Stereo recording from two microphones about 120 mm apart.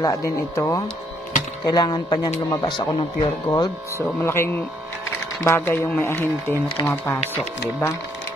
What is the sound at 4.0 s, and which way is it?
Speech, 20° left (ahead or behind).